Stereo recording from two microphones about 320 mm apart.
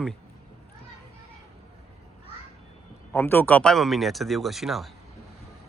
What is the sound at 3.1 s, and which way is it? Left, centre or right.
Speech, centre.